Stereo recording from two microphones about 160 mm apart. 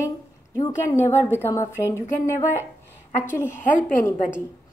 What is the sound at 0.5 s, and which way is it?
A woman's voice, 20° left (ahead or behind).